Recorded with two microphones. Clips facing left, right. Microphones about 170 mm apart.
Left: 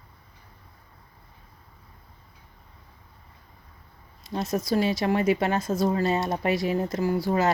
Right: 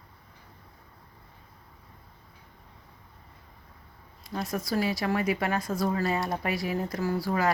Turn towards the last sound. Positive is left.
turn(degrees=25)  # may be behind; listen again after turning